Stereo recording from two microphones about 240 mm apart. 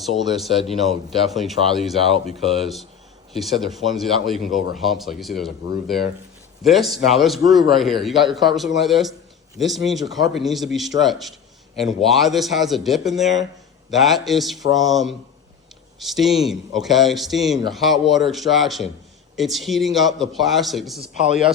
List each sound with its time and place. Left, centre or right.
0.0 s speech: centre
6.6 s speech: centre